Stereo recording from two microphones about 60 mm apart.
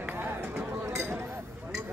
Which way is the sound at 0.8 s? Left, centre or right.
Right.